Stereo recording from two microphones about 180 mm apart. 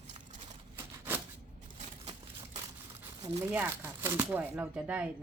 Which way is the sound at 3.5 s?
10° right (ahead or behind).